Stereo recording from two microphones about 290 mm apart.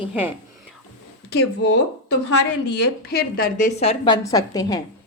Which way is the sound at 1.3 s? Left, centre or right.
Left.